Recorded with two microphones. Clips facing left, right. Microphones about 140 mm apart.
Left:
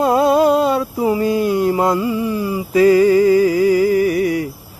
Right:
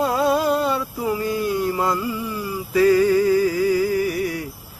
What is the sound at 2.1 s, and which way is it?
Speech, 80° left.